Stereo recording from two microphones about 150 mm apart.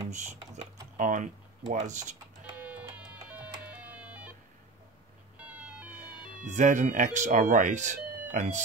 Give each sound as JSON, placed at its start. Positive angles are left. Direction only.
{"t": 0.1, "sound": "speech", "side_deg": -55}
{"t": 2.6, "sound": "music", "side_deg": -10}
{"t": 5.4, "sound": "cat", "side_deg": -10}
{"t": 6.4, "sound": "speech", "side_deg": -55}